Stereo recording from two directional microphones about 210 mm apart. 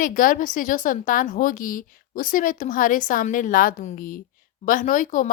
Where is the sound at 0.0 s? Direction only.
40° left (ahead or behind).